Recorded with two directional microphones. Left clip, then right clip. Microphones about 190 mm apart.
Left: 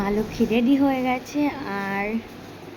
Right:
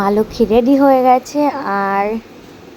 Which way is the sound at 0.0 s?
30° right (ahead or behind).